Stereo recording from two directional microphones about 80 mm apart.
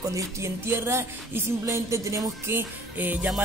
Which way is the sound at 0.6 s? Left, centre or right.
Right.